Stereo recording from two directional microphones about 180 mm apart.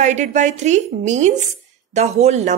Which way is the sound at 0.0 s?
40° right (ahead or behind).